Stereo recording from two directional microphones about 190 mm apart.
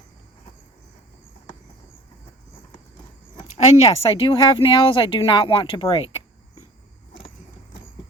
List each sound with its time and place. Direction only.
3.6 s speech: 35° left (ahead or behind)